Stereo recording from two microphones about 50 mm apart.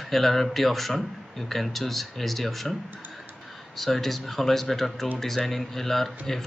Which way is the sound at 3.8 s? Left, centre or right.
Centre.